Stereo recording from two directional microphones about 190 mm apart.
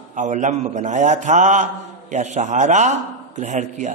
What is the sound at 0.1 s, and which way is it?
A man's voice, 40° right (ahead or behind).